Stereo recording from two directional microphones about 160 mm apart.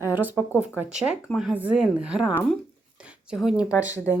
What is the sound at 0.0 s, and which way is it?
A woman's voice, 10° right (ahead or behind).